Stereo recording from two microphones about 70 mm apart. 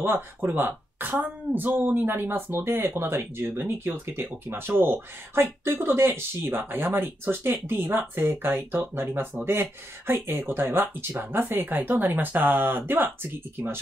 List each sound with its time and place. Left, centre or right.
0.0 s speech: right